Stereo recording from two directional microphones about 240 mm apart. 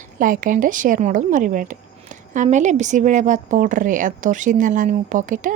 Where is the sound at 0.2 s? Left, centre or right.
Right.